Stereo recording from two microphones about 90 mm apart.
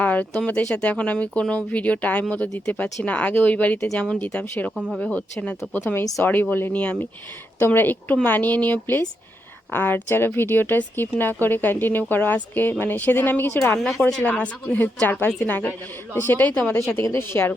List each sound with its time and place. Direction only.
0.0 s speech: 15° left (ahead or behind)
4.7 s speech: 5° right (ahead or behind)
4.9 s speech: 15° left (ahead or behind)
5.8 s speech: 25° left (ahead or behind)